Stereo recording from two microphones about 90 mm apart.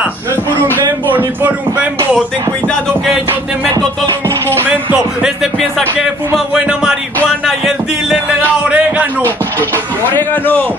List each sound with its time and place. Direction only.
1.1 s speech: 15° right (ahead or behind)
3.6 s music: 45° right (ahead or behind)
4.9 s speech: 5° right (ahead or behind)
7.4 s music: 5° right (ahead or behind)
8.4 s music: 15° right (ahead or behind)
10.1 s a man's voice: 20° left (ahead or behind)